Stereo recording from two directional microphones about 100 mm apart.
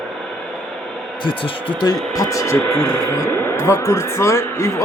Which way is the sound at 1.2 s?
55° left (ahead or behind).